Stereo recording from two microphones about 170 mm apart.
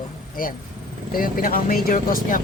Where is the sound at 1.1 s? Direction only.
55° left (ahead or behind).